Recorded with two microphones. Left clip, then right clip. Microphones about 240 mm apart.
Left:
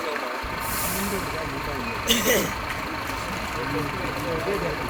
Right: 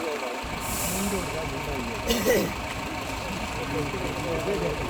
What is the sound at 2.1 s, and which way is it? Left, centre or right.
Speech, right.